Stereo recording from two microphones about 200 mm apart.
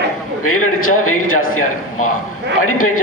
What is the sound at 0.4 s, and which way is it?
A man's voice, 90° left.